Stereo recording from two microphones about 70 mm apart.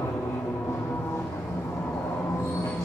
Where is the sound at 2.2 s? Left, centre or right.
Left.